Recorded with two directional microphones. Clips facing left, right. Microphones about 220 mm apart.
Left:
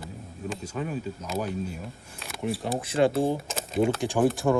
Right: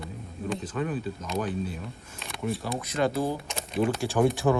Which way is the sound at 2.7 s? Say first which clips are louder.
Left 5 dB; 30° left (ahead or behind).